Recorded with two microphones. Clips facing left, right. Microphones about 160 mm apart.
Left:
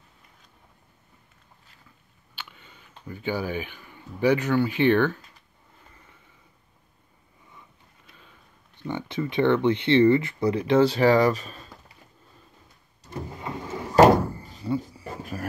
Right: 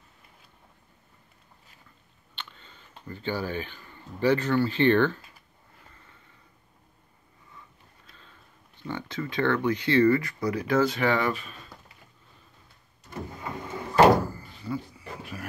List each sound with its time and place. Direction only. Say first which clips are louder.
2.3 s speech: left 1 dB; 10° left (ahead or behind)
8.1 s sniff: left 2 dB; 10° left (ahead or behind)
8.8 s speech: left 4 dB; 20° left (ahead or behind); by 11.6 s 40° left (ahead or behind)
14.2 s a sound: left 4 dB; 30° left (ahead or behind)